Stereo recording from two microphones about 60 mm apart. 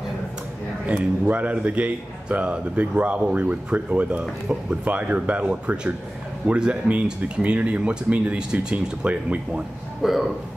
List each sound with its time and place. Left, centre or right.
0.8 s speech: right
10.0 s speech: centre